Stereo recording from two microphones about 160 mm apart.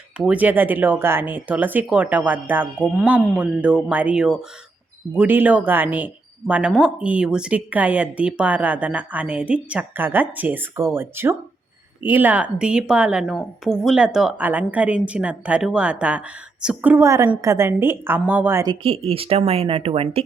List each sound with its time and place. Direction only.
0.2 s speech: 10° right (ahead or behind)
18.7 s speech: 35° right (ahead or behind)